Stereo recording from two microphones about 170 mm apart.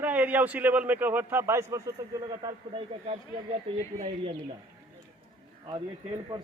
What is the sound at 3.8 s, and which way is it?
Speech, 40° right (ahead or behind).